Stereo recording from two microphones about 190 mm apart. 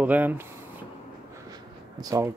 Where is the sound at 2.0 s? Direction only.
20° right (ahead or behind).